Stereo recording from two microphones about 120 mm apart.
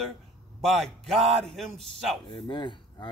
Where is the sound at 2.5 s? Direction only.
40° left (ahead or behind).